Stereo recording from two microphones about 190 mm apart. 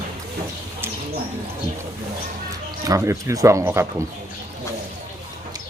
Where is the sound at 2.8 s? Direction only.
15° right (ahead or behind).